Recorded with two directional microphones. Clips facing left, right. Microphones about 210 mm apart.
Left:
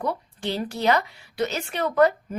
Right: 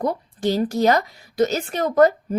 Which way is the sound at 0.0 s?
40° right (ahead or behind).